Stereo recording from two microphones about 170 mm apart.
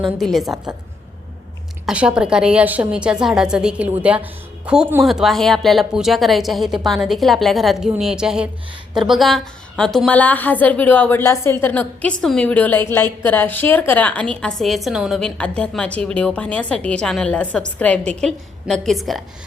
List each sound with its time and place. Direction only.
0.0 s a woman's voice: centre (ahead or behind)
0.5 s a woman's voice: 20° right (ahead or behind)
1.9 s a woman's voice: 5° right (ahead or behind)